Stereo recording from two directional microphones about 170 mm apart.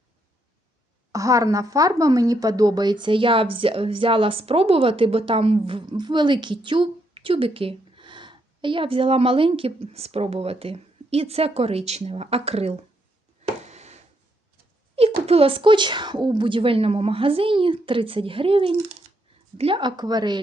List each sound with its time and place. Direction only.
1.1 s speech: 20° right (ahead or behind); by 12.8 s 40° right (ahead or behind)
13.6 s a sound: 40° right (ahead or behind)
14.9 s a woman's voice: 35° right (ahead or behind)